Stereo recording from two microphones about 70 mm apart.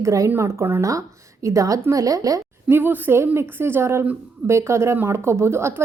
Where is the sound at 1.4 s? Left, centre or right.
Right.